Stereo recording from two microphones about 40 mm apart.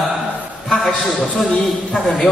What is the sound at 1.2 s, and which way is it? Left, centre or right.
Speech, left.